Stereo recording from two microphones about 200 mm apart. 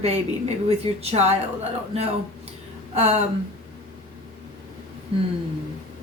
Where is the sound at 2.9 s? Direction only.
30° right (ahead or behind).